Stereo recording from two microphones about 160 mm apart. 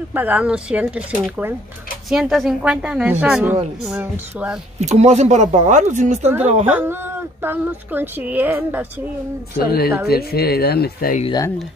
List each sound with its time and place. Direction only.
0.1 s a woman's voice: 10° right (ahead or behind)
4.7 s speech: 45° right (ahead or behind)
6.6 s speech: 10° right (ahead or behind)
9.7 s speech: 75° left (ahead or behind)